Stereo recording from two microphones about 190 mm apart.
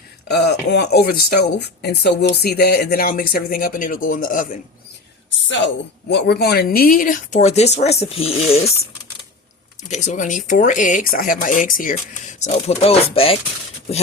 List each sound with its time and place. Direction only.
0.3 s speech: 60° left (ahead or behind); by 4.6 s 45° left (ahead or behind)
5.5 s speech: 70° left (ahead or behind); by 8.7 s 30° left (ahead or behind)
9.9 s speech: 40° left (ahead or behind)